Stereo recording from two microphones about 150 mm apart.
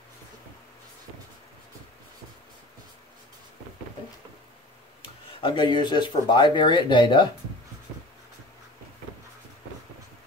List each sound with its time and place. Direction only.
5.4 s speech: 30° left (ahead or behind)